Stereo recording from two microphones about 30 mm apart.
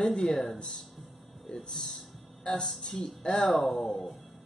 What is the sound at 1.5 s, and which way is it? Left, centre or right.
Speech, left.